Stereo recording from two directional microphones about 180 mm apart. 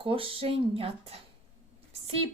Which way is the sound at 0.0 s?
30° right (ahead or behind).